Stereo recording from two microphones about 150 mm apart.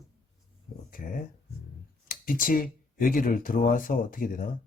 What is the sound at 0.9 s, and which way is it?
Speech, 65° left (ahead or behind).